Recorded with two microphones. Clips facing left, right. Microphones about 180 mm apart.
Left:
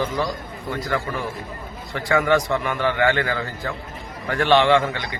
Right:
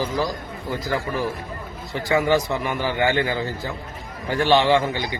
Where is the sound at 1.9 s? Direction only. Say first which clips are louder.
Even; 30° right (ahead or behind).